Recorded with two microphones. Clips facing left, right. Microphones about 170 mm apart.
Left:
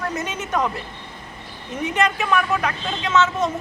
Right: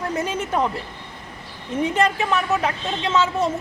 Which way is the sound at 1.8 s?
30° right (ahead or behind).